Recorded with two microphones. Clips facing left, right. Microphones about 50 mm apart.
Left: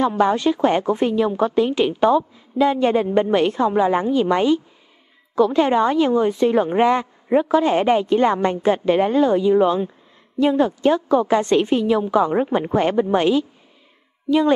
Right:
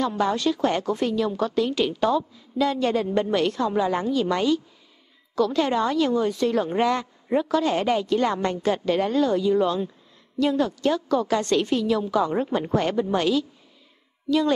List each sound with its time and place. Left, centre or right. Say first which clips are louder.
0.0 s a woman's voice: left 5 dB; left